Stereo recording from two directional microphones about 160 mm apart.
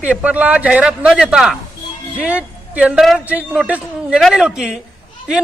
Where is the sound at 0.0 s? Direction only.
10° right (ahead or behind).